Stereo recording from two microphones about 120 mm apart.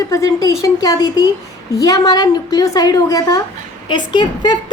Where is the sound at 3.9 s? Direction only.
40° left (ahead or behind).